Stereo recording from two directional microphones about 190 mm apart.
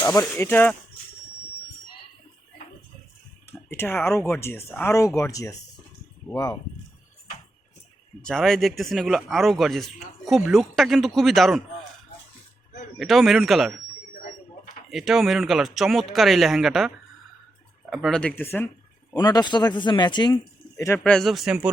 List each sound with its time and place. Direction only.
0.0 s speech: 15° left (ahead or behind)
3.4 s a sound: 10° left (ahead or behind)
4.3 s speech: 15° left (ahead or behind)
8.2 s speech: 5° left (ahead or behind)
13.0 s speech: centre (ahead or behind)
14.8 s speech: centre (ahead or behind)
17.9 s speech: centre (ahead or behind)
19.1 s speech: 20° left (ahead or behind); by 21.7 s 5° right (ahead or behind)